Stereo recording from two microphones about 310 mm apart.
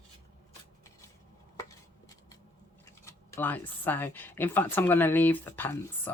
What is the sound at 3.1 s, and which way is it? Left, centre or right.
Speech, centre.